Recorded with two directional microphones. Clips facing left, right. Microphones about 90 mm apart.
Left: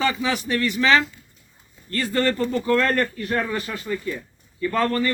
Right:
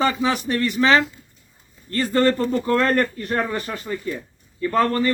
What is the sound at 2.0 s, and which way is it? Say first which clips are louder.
Speech: right 3 dB; 35° right (ahead or behind).